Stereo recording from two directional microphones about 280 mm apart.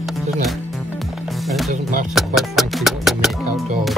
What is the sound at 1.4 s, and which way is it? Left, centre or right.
Music, centre.